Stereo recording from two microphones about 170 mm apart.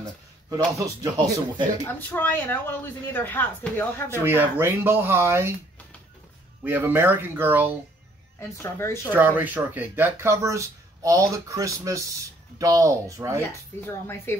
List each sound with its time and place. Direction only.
0.7 s speech: 20° right (ahead or behind)
1.9 s speech: 10° left (ahead or behind)
4.2 s speech: 15° right (ahead or behind)
6.6 s speech: 10° right (ahead or behind)
8.4 s speech: 15° left (ahead or behind)
9.1 s speech: 10° right (ahead or behind)
13.7 s speech: 15° left (ahead or behind)